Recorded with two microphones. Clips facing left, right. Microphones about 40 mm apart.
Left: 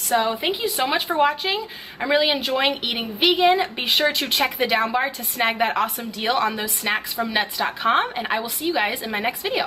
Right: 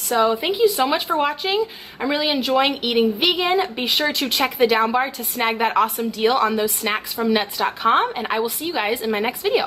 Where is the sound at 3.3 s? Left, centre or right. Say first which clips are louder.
Left 3 dB; left.